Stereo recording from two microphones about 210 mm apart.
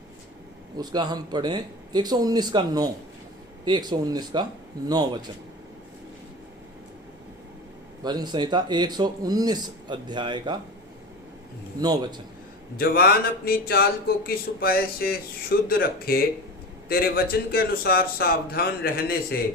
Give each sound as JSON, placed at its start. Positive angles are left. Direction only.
{"t": 0.8, "sound": "a man's voice", "side_deg": -20}
{"t": 8.0, "sound": "speech", "side_deg": -20}
{"t": 11.8, "sound": "speech", "side_deg": -20}
{"t": 12.7, "sound": "a man's voice", "side_deg": 45}